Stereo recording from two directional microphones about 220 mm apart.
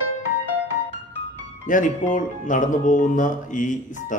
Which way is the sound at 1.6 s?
35° left (ahead or behind).